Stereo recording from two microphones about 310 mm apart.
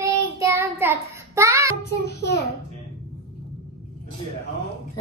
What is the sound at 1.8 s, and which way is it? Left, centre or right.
Child singing, left.